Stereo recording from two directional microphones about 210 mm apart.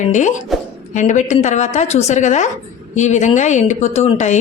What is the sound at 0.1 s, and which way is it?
A woman's voice, 35° left (ahead or behind).